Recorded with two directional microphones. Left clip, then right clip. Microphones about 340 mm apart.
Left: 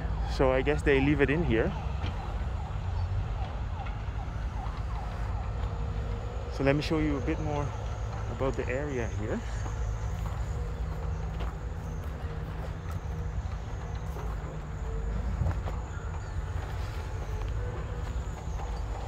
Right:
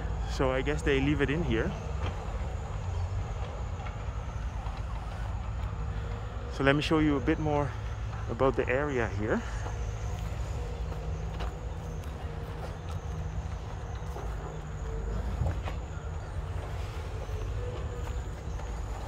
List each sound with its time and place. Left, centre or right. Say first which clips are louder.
0.3 s speech: left 4 dB; centre
6.6 s speech: right 2 dB; centre